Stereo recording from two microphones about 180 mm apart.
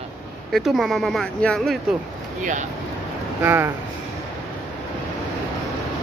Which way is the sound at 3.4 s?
10° right (ahead or behind).